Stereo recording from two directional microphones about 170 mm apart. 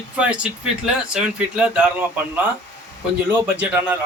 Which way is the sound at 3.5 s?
10° right (ahead or behind).